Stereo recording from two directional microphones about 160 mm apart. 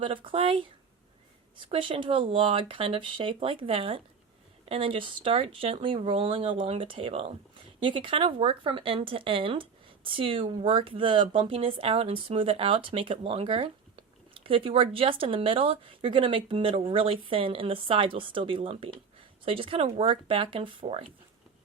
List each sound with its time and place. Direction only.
0.0 s speech: 30° right (ahead or behind)